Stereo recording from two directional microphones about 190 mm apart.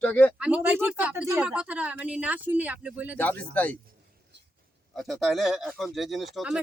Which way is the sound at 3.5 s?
10° left (ahead or behind).